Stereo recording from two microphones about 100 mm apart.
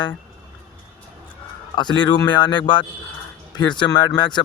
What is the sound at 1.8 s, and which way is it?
Speech, 45° left (ahead or behind).